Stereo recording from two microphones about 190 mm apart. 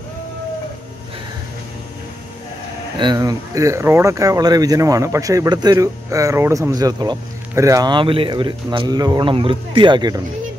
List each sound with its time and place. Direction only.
3.0 s speech: 20° right (ahead or behind)